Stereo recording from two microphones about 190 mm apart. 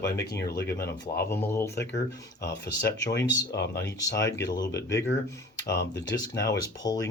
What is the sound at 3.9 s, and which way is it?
Speech, 20° left (ahead or behind).